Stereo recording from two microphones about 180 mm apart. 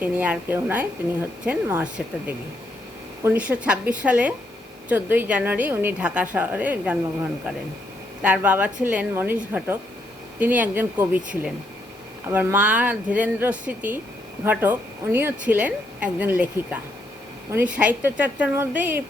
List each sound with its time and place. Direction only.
0.0 s a woman's voice: 10° right (ahead or behind)
12.3 s a woman's voice: 10° right (ahead or behind)
17.7 s a woman's voice: 10° right (ahead or behind)